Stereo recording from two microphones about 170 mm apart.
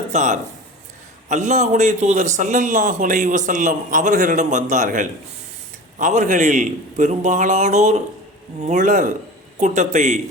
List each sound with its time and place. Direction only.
0.1 s a man's voice: 45° right (ahead or behind)